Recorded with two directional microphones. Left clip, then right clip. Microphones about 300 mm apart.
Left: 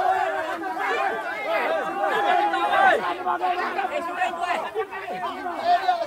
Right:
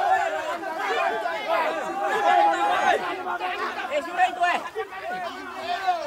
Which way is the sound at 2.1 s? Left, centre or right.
Centre.